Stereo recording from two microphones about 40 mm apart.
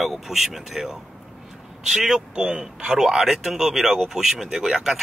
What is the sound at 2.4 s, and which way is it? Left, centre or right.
Speech, centre.